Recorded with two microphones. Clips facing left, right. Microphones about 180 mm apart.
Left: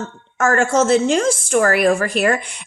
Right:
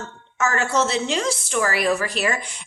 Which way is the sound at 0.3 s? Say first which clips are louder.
Left 6 dB; 50° left (ahead or behind).